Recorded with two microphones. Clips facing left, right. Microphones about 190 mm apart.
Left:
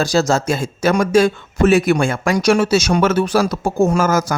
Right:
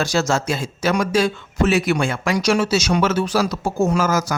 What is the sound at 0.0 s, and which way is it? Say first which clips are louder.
Speech: left 4 dB; 35° left (ahead or behind).